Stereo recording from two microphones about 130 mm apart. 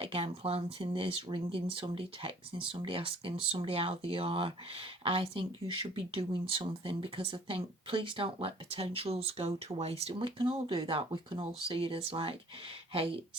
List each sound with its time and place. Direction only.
0.0 s speech: 50° right (ahead or behind)